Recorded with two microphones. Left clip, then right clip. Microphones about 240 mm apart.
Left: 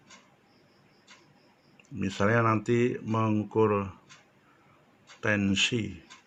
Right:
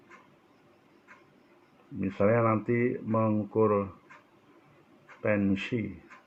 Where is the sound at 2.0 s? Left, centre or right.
Left.